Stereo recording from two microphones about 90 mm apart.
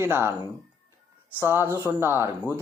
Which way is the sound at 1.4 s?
25° right (ahead or behind).